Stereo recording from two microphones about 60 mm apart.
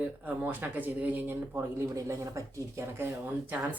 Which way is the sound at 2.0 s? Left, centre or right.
Right.